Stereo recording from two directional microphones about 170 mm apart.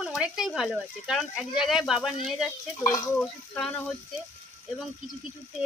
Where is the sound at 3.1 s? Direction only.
5° left (ahead or behind).